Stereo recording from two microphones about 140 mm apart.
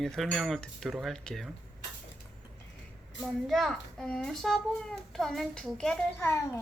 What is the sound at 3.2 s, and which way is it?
A child's voice, centre (ahead or behind).